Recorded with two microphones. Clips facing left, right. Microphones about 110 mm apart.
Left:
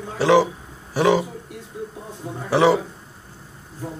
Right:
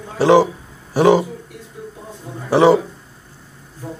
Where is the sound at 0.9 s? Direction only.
40° right (ahead or behind).